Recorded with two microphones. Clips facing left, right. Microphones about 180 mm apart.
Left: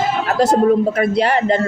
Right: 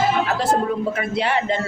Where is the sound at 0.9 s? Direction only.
40° left (ahead or behind).